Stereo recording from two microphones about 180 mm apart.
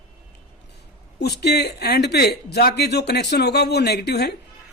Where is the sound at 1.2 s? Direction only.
65° left (ahead or behind).